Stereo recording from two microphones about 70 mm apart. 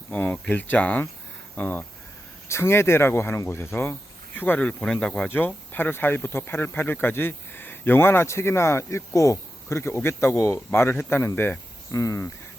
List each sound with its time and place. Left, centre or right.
0.1 s speech: left
2.5 s speech: left
4.9 s speech: centre
5.7 s speech: left
11.9 s speech: left